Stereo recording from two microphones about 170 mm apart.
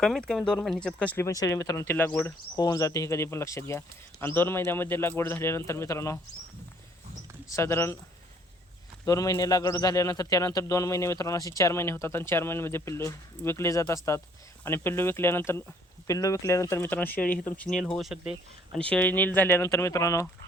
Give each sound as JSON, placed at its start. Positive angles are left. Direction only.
{"t": 0.0, "sound": "a man's voice", "side_deg": 5}
{"t": 2.6, "sound": "a man's voice", "side_deg": 20}
{"t": 7.5, "sound": "a man's voice", "side_deg": 15}
{"t": 9.0, "sound": "a man's voice", "side_deg": 20}
{"t": 18.9, "sound": "a man's voice", "side_deg": 10}